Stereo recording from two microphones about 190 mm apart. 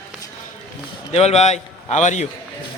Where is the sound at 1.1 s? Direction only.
35° left (ahead or behind).